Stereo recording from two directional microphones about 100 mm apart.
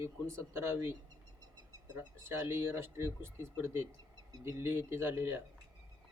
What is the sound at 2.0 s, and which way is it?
Speech, 25° right (ahead or behind).